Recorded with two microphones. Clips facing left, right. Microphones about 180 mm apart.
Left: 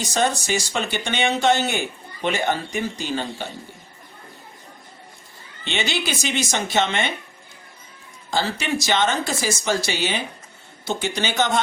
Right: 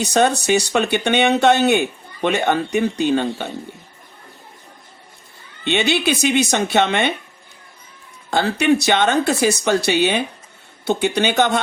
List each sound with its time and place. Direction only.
0.0 s speech: 65° right (ahead or behind)
5.6 s speech: 60° right (ahead or behind)
8.3 s speech: 60° right (ahead or behind)